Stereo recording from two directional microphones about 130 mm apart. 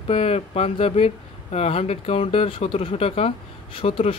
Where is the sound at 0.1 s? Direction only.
50° left (ahead or behind).